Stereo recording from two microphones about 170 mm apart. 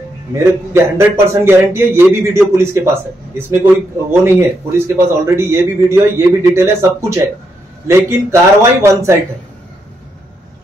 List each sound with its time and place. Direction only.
0.3 s a man's voice: 15° right (ahead or behind)